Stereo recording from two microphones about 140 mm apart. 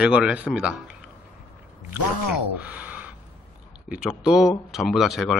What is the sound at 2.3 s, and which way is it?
Speech, 10° right (ahead or behind).